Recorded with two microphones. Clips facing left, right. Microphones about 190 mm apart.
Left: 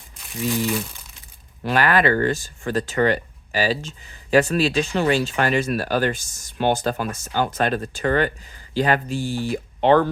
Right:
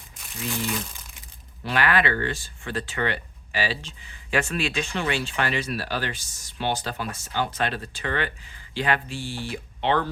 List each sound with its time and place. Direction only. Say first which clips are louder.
1.6 s speech: left 5 dB; 40° left (ahead or behind)